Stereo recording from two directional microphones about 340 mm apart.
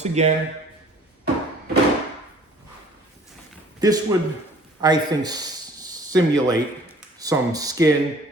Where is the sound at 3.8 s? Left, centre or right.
Centre.